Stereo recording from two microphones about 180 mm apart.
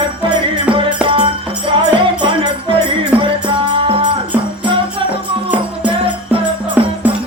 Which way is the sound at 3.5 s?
30° right (ahead or behind).